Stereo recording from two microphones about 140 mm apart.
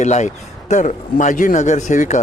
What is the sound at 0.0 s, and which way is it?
A man's voice, 55° left (ahead or behind).